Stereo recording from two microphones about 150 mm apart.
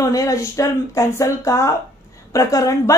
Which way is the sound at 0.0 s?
20° left (ahead or behind).